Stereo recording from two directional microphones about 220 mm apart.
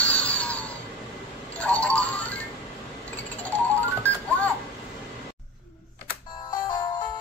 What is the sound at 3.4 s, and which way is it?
Music, 5° left (ahead or behind).